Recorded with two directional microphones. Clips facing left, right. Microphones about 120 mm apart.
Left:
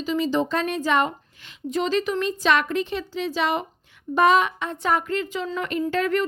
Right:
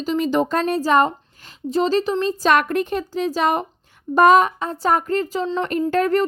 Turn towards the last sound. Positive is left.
turn(degrees=-40)  # may be behind; listen again after turning